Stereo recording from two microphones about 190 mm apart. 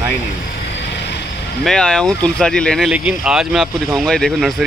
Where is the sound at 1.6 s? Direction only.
5° left (ahead or behind).